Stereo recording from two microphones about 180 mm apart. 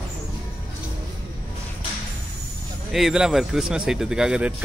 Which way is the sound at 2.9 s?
5° right (ahead or behind).